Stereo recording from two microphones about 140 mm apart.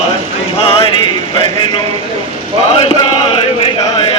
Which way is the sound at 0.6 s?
45° left (ahead or behind).